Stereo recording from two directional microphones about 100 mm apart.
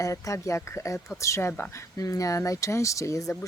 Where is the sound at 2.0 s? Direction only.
35° left (ahead or behind).